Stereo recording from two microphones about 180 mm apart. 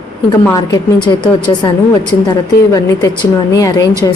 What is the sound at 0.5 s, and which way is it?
A woman's voice, 20° left (ahead or behind).